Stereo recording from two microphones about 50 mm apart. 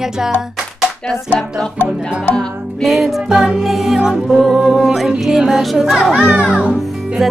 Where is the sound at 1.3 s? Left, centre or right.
Left.